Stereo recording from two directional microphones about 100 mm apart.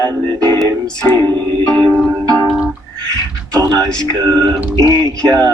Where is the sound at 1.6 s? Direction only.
40° right (ahead or behind).